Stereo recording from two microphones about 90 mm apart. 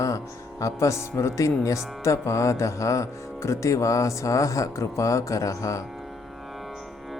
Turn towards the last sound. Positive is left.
turn(degrees=35)  # may be behind; listen again after turning